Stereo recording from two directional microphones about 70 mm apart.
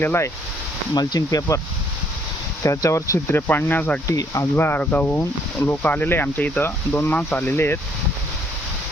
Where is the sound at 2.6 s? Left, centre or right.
Left.